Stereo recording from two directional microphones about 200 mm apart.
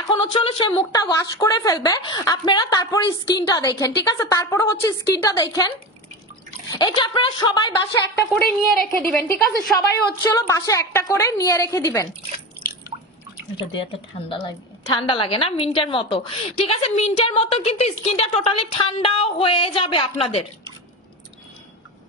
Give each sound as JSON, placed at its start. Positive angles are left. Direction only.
{"t": 0.2, "sound": "a woman's voice", "side_deg": 25}
{"t": 6.7, "sound": "a woman's voice", "side_deg": 25}
{"t": 8.7, "sound": "a woman's voice", "side_deg": 5}
{"t": 9.8, "sound": "a woman's voice", "side_deg": 15}
{"t": 13.6, "sound": "a woman's voice", "side_deg": 20}